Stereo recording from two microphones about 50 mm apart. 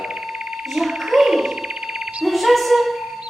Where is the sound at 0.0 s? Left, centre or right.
Centre.